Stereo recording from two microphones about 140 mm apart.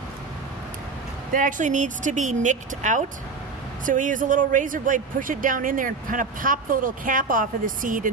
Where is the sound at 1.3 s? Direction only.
70° right (ahead or behind).